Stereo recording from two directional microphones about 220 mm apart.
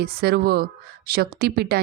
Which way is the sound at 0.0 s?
45° right (ahead or behind).